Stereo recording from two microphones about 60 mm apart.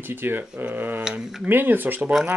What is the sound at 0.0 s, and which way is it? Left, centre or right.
Speech, right.